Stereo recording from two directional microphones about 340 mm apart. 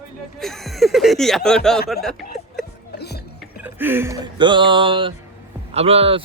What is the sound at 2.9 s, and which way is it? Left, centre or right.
Music, left.